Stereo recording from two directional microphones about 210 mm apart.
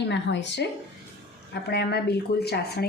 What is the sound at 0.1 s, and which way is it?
Speech, 55° left (ahead or behind).